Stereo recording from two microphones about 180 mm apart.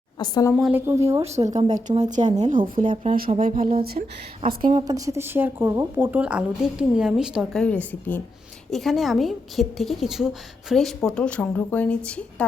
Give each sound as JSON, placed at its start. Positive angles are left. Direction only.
{"t": 0.2, "sound": "a woman's voice", "side_deg": 20}
{"t": 0.5, "sound": "a woman's voice", "side_deg": 0}
{"t": 0.9, "sound": "speech", "side_deg": -15}
{"t": 1.2, "sound": "a woman's voice", "side_deg": -40}
{"t": 4.7, "sound": "a woman's voice", "side_deg": -20}